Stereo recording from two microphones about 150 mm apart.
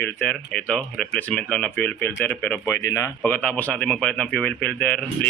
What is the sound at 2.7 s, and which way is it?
Speech, 20° left (ahead or behind).